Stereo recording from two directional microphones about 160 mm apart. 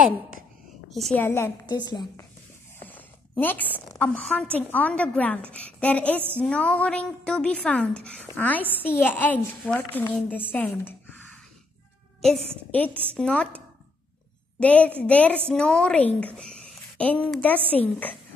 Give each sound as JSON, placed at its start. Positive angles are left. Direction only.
{"t": 0.8, "sound": "a woman's voice", "side_deg": 0}
{"t": 1.2, "sound": "a woman's voice", "side_deg": 15}
{"t": 1.7, "sound": "a woman's voice", "side_deg": 25}
{"t": 2.9, "sound": "a sound", "side_deg": 10}
{"t": 4.0, "sound": "a woman's voice", "side_deg": 5}
{"t": 14.6, "sound": "a woman's voice", "side_deg": 10}